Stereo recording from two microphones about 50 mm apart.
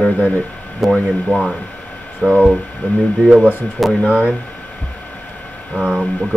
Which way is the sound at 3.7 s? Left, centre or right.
Centre.